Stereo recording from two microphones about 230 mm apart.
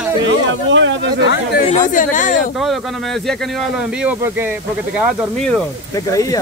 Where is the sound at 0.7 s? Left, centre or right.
Right.